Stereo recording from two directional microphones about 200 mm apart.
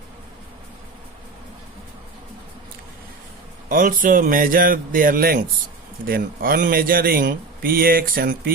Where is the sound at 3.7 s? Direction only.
45° right (ahead or behind).